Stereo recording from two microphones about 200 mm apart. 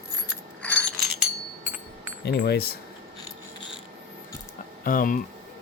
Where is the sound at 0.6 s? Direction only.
5° left (ahead or behind).